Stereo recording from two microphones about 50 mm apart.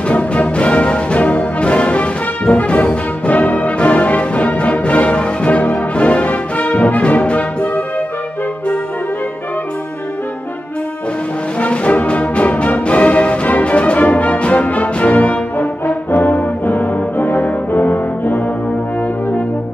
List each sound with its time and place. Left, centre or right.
0.1 s music: left
11.6 s music: left